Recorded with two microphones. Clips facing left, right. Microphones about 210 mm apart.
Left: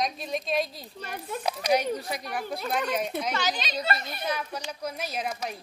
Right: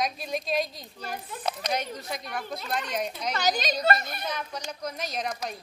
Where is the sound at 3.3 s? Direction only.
40° right (ahead or behind).